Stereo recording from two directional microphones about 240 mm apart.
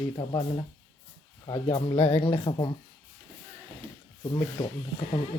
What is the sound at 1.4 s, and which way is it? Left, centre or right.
Speech, left.